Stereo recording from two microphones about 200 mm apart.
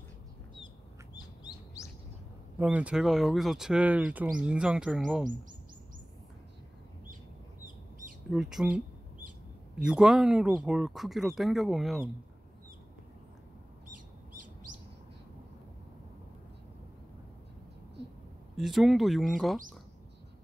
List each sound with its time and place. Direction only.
1.1 s bird: 20° left (ahead or behind)
2.6 s speech: 5° right (ahead or behind)
8.3 s speech: centre (ahead or behind)
18.0 s a sound: 60° right (ahead or behind)
18.6 s speech: centre (ahead or behind)